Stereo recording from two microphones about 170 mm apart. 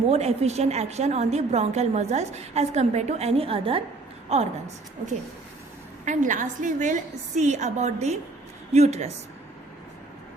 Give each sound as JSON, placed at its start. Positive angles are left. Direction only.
{"t": 0.1, "sound": "a woman's voice", "side_deg": -40}
{"t": 6.1, "sound": "a woman's voice", "side_deg": -50}